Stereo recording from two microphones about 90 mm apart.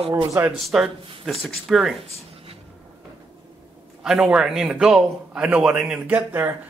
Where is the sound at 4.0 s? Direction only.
5° right (ahead or behind).